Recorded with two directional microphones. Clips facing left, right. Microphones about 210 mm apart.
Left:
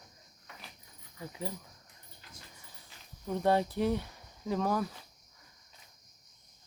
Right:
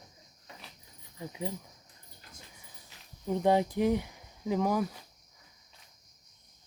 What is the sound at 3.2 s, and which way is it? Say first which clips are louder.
Speech: right 2 dB; 15° right (ahead or behind).